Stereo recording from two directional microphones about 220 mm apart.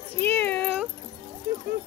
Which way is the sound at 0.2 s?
10° left (ahead or behind).